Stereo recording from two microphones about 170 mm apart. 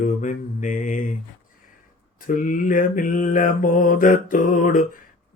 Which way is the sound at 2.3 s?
50° left (ahead or behind).